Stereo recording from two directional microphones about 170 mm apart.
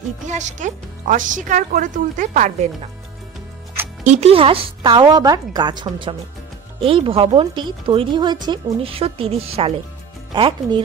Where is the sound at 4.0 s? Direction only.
40° right (ahead or behind).